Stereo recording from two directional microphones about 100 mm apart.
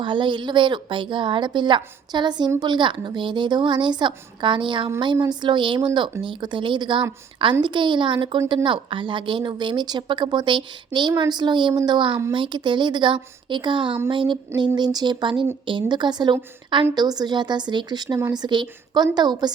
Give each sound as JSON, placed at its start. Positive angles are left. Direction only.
{"t": 0.0, "sound": "a woman's voice", "side_deg": -55}
{"t": 11.7, "sound": "speech", "side_deg": -35}
{"t": 12.3, "sound": "a woman's voice", "side_deg": -55}
{"t": 16.9, "sound": "a woman's voice", "side_deg": -45}
{"t": 18.2, "sound": "speech", "side_deg": -35}
{"t": 18.4, "sound": "a woman's voice", "side_deg": -50}